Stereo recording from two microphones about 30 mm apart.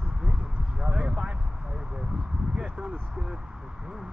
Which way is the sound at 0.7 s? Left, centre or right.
Right.